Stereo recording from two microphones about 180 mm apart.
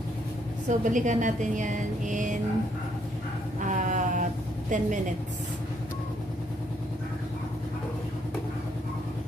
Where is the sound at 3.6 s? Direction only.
45° right (ahead or behind).